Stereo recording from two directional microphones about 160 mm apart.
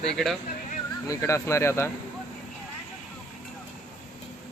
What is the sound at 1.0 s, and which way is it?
Speech, 20° left (ahead or behind).